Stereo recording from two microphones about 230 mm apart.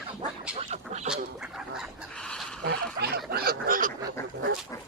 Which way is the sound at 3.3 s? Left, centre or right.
Right.